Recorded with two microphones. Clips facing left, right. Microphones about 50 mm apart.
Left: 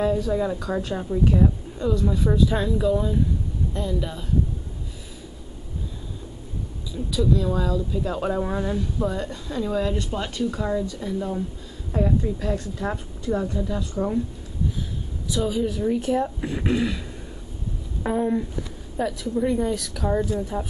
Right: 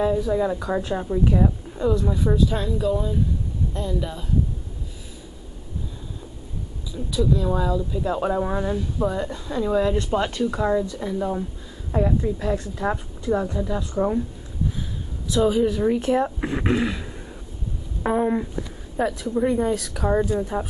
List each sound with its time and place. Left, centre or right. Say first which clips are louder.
0.0 s speech: right 1 dB; centre
6.9 s speech: even; centre
15.3 s speech: right 5 dB; centre
18.0 s a sound: right 2 dB; right
18.9 s speech: right 2 dB; centre